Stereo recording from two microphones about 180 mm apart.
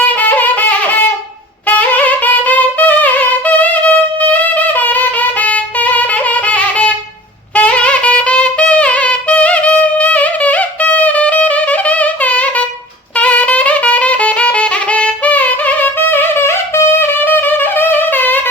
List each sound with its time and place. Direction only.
0.2 s music: 10° left (ahead or behind)